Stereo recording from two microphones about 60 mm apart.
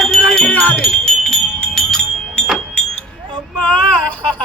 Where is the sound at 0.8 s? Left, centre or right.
Centre.